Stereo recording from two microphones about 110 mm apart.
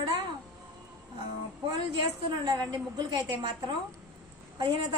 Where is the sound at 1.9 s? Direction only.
45° right (ahead or behind).